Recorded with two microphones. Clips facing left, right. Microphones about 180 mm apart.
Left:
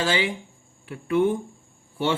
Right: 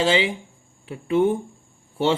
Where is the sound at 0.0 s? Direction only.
25° right (ahead or behind).